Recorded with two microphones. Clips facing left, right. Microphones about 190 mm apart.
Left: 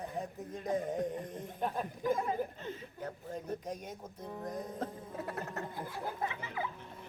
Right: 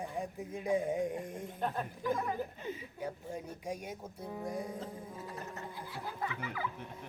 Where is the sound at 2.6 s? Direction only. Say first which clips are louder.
Right 2 dB; 10° right (ahead or behind).